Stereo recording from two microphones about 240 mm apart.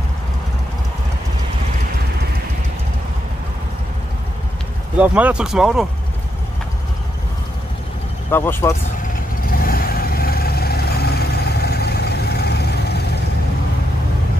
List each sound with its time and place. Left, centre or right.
4.9 s speech: centre
8.3 s speech: centre
9.5 s vehicle: left